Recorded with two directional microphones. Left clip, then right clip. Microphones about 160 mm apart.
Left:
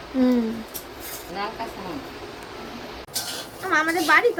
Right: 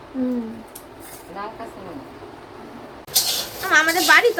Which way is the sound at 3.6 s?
10° left (ahead or behind).